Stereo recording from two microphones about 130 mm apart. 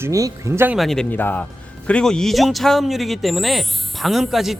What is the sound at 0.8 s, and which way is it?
Speech, 5° left (ahead or behind).